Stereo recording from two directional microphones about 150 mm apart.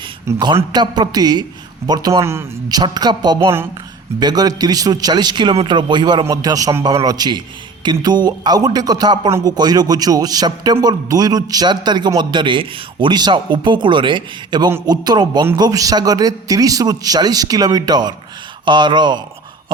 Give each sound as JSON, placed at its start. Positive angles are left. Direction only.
{"t": 0.3, "sound": "a man's voice", "side_deg": -30}